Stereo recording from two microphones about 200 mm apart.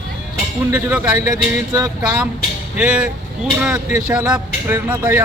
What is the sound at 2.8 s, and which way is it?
Speech, 5° right (ahead or behind).